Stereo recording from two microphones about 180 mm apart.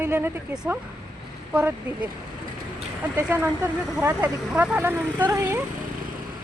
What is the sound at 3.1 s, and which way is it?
Speech, 10° right (ahead or behind).